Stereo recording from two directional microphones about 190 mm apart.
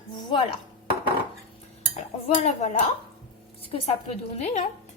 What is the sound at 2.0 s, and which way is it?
Cutlery, 35° left (ahead or behind).